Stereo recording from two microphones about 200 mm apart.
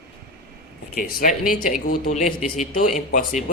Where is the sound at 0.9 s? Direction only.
45° left (ahead or behind).